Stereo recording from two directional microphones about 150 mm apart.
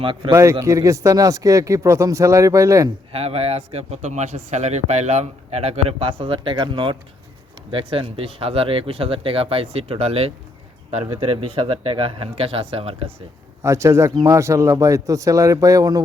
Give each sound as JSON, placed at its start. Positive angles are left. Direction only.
{"t": 0.0, "sound": "speech", "side_deg": -35}
{"t": 0.6, "sound": "a man's voice", "side_deg": -20}
{"t": 3.1, "sound": "speech", "side_deg": -45}
{"t": 13.6, "sound": "a man's voice", "side_deg": -20}